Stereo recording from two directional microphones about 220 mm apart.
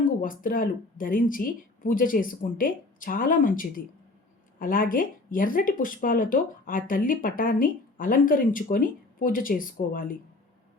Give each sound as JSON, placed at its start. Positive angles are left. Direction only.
{"t": 0.0, "sound": "speech", "side_deg": 40}